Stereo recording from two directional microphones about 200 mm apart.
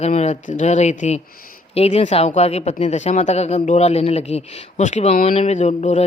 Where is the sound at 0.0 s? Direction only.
35° left (ahead or behind).